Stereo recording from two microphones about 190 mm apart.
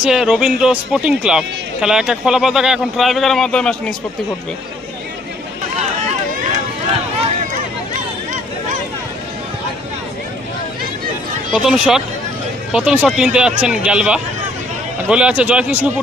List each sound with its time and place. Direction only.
0.0 s a man's voice: 5° right (ahead or behind)
5.7 s run: 35° right (ahead or behind)
11.6 s a man's voice: centre (ahead or behind)